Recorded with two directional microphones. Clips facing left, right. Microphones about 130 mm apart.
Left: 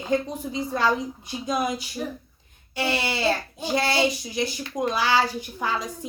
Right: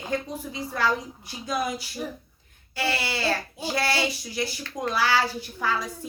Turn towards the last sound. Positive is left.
turn(degrees=20)  # may be behind; listen again after turning